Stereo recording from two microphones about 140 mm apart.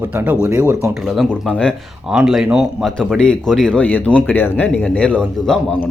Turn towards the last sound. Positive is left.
turn(degrees=5)  # may be behind; listen again after turning